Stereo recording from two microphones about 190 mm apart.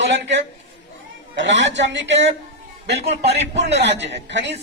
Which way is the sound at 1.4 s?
70° right (ahead or behind).